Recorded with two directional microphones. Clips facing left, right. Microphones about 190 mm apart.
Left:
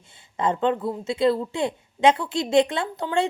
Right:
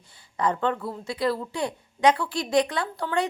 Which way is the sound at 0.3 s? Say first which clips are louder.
Left 3 dB; 25° left (ahead or behind).